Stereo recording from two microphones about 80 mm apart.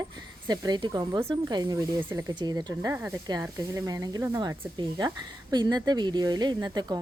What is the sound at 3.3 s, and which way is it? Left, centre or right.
Speech, right.